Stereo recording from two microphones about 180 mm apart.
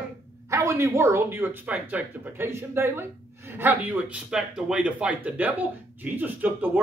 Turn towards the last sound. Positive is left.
turn(degrees=-10)  # may be behind; listen again after turning